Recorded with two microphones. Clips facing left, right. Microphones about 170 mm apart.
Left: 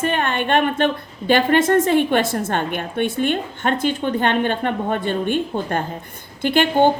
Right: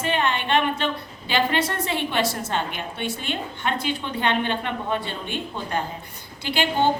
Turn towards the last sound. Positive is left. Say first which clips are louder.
# left 7 dB
turn(degrees=50)  # may be behind; listen again after turning